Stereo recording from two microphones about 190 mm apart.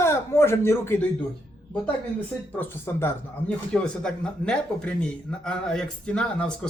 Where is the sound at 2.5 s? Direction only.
10° left (ahead or behind).